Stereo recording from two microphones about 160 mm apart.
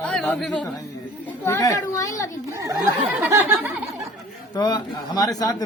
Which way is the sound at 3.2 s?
10° right (ahead or behind).